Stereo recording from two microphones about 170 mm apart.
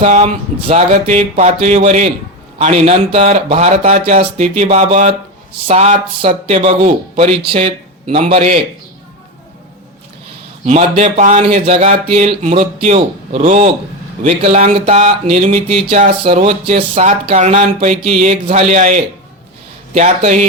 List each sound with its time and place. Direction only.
0.0 s a man's voice: 40° right (ahead or behind)
7.4 s speech: 30° right (ahead or behind)
10.7 s a man's voice: 40° right (ahead or behind)